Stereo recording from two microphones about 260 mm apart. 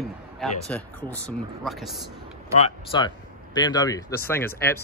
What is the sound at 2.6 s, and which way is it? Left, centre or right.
A man's voice, centre.